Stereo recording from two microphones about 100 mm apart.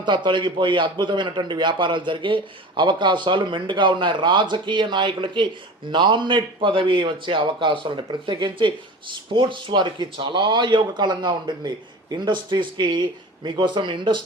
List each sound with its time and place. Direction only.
0.0 s a man's voice: 50° right (ahead or behind)